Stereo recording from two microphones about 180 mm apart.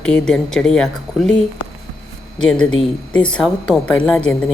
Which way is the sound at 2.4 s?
5° left (ahead or behind).